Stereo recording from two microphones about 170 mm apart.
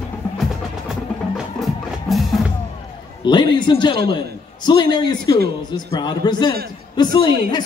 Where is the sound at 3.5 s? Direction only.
25° left (ahead or behind).